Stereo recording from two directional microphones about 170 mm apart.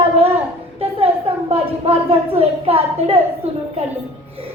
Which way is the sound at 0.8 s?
35° right (ahead or behind).